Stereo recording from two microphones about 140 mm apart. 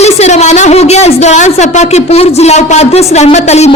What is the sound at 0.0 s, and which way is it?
A woman's voice, 50° left (ahead or behind).